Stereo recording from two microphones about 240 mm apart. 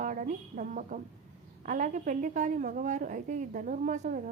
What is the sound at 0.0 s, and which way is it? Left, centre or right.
A woman's voice, right.